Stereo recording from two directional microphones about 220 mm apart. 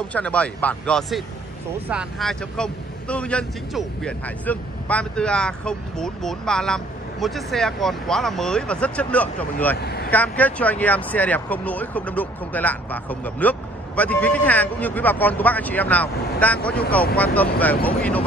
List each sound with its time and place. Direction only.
0.1 s speech: 5° left (ahead or behind)
9.8 s speech: 45° left (ahead or behind)
10.1 s speech: 5° left (ahead or behind)